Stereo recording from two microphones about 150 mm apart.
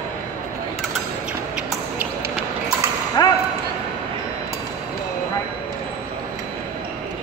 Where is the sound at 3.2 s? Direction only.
25° left (ahead or behind).